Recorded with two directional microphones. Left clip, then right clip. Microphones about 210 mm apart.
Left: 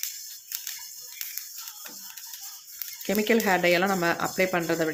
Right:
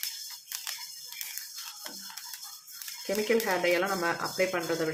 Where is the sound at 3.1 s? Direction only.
40° left (ahead or behind).